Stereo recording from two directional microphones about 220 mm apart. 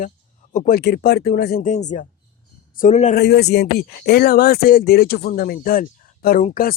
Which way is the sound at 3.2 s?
50° left (ahead or behind).